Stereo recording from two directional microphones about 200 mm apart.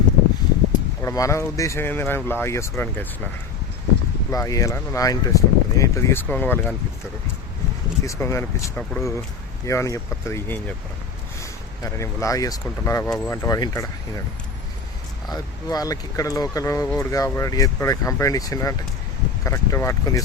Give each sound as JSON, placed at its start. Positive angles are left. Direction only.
{"t": 1.0, "sound": "speech", "side_deg": 15}
{"t": 4.3, "sound": "speech", "side_deg": 15}
{"t": 8.0, "sound": "speech", "side_deg": 15}
{"t": 15.3, "sound": "speech", "side_deg": 20}